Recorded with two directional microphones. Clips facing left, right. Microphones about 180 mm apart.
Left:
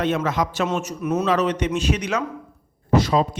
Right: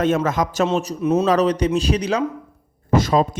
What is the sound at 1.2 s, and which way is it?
Speech, 40° right (ahead or behind).